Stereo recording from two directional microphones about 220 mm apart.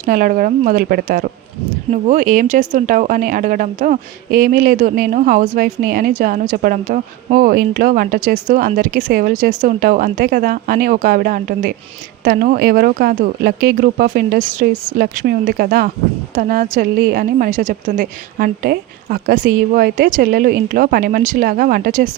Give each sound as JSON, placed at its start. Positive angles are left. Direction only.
{"t": 0.0, "sound": "speech", "side_deg": -40}